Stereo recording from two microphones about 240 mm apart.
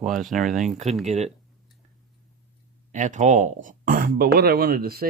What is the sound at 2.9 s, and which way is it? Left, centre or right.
Speech, right.